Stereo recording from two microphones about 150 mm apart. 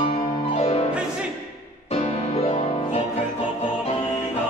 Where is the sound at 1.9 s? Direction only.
40° left (ahead or behind).